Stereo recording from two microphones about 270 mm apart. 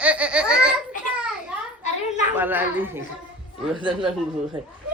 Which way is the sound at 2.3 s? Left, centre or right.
Centre.